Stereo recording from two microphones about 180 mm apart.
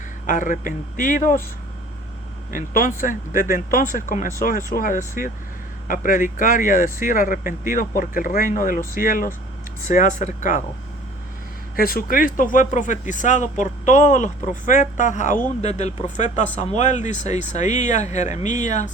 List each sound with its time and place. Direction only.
0.3 s speech: 45° left (ahead or behind)
2.5 s speech: 50° left (ahead or behind)
11.8 s speech: 55° left (ahead or behind)